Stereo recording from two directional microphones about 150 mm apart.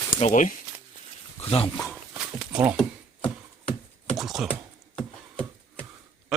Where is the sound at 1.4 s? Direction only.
40° left (ahead or behind).